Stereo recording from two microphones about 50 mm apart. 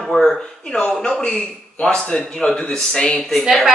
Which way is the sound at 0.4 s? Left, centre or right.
Centre.